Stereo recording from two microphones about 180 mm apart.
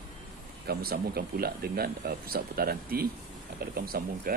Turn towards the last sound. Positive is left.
turn(degrees=-55)  # may be behind; listen again after turning